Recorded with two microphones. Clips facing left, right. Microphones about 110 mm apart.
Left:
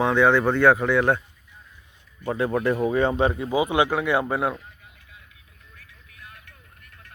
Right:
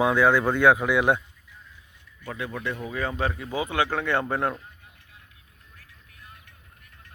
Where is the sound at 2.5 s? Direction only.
45° left (ahead or behind).